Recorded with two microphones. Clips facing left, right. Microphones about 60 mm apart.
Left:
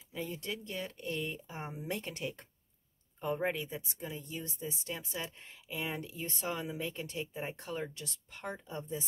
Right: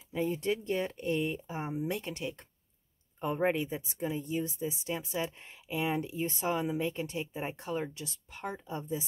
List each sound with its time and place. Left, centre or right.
0.1 s speech: right; by 2.4 s centre
3.3 s speech: right